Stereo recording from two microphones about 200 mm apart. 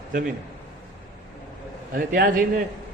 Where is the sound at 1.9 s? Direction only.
45° right (ahead or behind).